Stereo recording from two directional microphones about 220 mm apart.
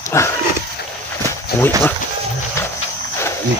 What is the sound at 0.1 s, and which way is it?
Speech, 15° left (ahead or behind).